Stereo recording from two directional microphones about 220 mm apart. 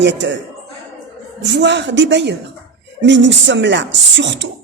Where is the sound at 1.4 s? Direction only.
50° right (ahead or behind).